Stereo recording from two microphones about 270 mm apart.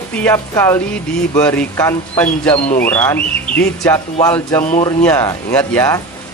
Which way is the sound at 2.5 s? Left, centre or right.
Left.